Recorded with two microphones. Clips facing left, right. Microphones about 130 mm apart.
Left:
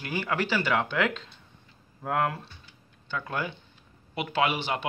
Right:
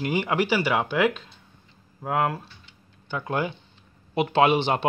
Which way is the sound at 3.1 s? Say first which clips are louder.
Right 5 dB; 15° right (ahead or behind).